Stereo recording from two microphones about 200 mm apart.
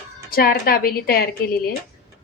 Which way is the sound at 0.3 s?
45° left (ahead or behind).